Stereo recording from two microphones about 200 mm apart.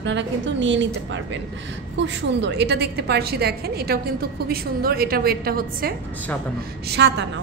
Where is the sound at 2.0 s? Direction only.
60° right (ahead or behind).